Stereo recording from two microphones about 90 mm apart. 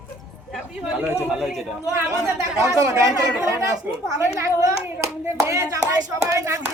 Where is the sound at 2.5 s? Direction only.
35° right (ahead or behind).